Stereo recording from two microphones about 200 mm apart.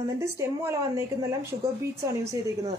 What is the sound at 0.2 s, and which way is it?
A woman's voice, 15° right (ahead or behind).